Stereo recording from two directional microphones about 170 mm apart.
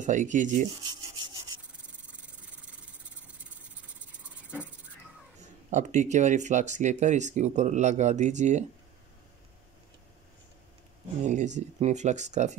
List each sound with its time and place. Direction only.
0.0 s speech: 45° right (ahead or behind)
0.8 s rub: 25° right (ahead or behind)
5.7 s speech: 45° right (ahead or behind)
11.2 s speech: 45° right (ahead or behind)